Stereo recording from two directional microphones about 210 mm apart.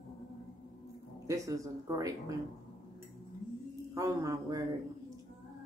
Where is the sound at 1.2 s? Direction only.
15° right (ahead or behind).